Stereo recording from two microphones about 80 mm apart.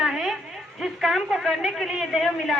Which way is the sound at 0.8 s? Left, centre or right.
Centre.